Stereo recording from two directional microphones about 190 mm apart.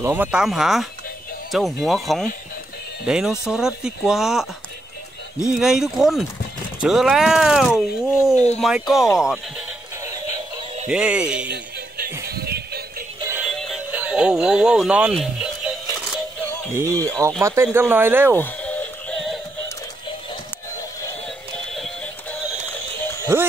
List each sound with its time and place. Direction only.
0.0 s speech: 10° right (ahead or behind)
5.5 s speech: centre (ahead or behind)
10.9 s speech: 5° right (ahead or behind)
11.4 s music: 55° right (ahead or behind)
13.4 s music: centre (ahead or behind)
16.7 s speech: 15° right (ahead or behind)
18.3 s synthetic singing: 10° left (ahead or behind)
21.7 s music: centre (ahead or behind)